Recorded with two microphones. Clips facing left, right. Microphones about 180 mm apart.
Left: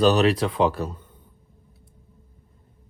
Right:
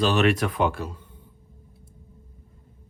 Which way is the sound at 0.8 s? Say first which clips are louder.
Left 4 dB; 45° left (ahead or behind).